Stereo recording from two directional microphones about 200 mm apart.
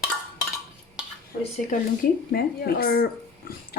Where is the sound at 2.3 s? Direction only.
50° left (ahead or behind).